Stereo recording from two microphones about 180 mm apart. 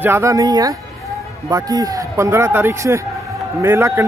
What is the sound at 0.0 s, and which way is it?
Speech, 15° right (ahead or behind).